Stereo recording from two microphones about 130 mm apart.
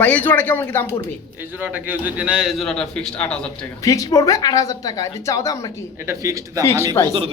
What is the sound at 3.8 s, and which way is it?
A man's voice, 25° left (ahead or behind).